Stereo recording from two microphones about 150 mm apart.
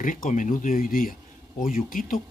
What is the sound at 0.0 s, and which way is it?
Speech, 65° left (ahead or behind).